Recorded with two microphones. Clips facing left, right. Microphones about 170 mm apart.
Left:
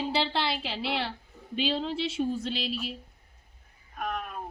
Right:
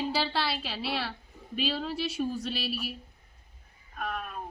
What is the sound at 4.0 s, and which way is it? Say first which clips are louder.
Speech: left 2 dB; 15° left (ahead or behind).